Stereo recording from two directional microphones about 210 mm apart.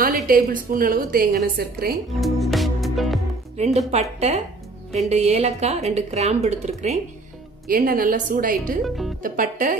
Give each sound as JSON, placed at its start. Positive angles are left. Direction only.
{"t": 0.3, "sound": "a woman's voice", "side_deg": -40}
{"t": 2.1, "sound": "music", "side_deg": 0}
{"t": 3.5, "sound": "speech", "side_deg": -30}
{"t": 7.6, "sound": "a woman's voice", "side_deg": -45}
{"t": 8.8, "sound": "speech", "side_deg": 0}
{"t": 9.2, "sound": "speech", "side_deg": -40}